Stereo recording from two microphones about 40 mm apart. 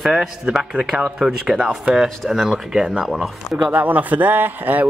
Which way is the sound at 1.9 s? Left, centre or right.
Centre.